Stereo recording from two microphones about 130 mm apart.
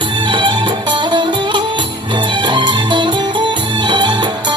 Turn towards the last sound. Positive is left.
turn(degrees=-35)  # may be behind; listen again after turning